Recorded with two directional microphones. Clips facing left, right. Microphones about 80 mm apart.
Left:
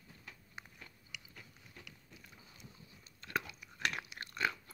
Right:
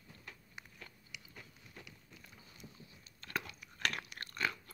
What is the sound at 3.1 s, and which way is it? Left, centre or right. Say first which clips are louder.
Crunch: left 2 dB; left.